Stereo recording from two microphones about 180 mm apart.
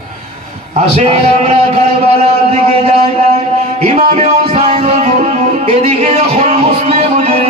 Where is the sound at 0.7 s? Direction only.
40° right (ahead or behind).